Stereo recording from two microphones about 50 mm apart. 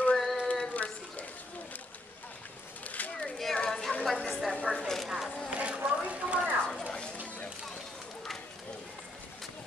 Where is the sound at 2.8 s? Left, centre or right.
Left.